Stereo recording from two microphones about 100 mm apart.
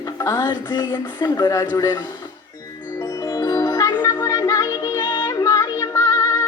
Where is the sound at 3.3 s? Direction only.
40° left (ahead or behind).